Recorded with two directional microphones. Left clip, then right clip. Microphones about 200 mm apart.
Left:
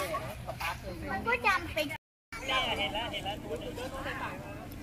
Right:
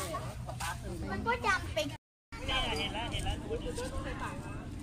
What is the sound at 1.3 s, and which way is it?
Speech, 50° right (ahead or behind).